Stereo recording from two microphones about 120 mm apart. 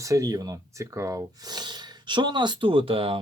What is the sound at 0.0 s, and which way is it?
Speech, 30° right (ahead or behind).